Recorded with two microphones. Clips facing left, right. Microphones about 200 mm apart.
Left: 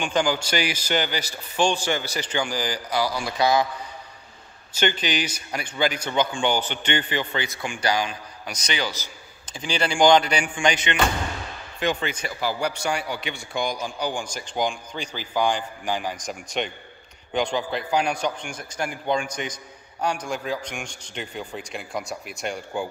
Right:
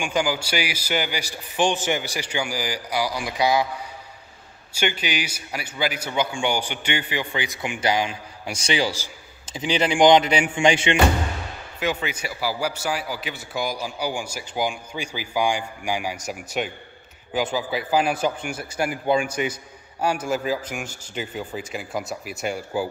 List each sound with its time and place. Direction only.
0.0 s a man's voice: 10° right (ahead or behind)
4.7 s a man's voice: 10° right (ahead or behind); by 11.0 s 30° right (ahead or behind)
11.8 s a man's voice: 5° right (ahead or behind)